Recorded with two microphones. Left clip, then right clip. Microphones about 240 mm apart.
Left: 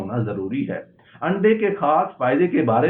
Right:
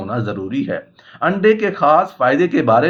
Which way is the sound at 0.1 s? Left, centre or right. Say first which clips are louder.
Right 5 dB; right.